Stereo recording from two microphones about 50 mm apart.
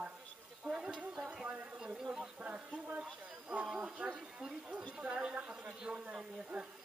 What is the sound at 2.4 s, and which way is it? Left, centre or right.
A woman's voice, right.